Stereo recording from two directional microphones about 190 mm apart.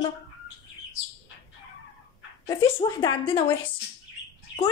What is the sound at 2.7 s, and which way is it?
Speech, 25° left (ahead or behind).